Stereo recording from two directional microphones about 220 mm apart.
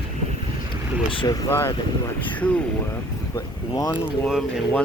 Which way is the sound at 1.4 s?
10° left (ahead or behind).